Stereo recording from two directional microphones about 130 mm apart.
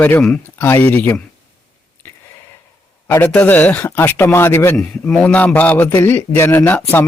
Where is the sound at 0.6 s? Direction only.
15° left (ahead or behind).